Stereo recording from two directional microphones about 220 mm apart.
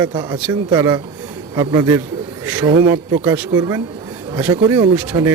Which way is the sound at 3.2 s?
10° right (ahead or behind).